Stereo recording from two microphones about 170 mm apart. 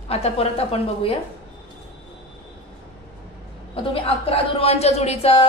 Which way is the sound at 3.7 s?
35° left (ahead or behind).